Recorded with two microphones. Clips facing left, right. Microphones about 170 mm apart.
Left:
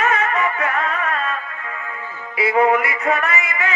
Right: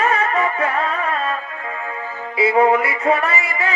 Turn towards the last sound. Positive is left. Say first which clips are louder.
# right 1 dB
turn(degrees=-30)  # may be behind; listen again after turning